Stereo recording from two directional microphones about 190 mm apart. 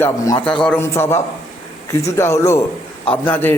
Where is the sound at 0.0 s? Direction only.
10° left (ahead or behind).